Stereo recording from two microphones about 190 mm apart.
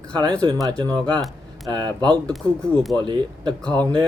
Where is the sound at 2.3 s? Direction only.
Centre (ahead or behind).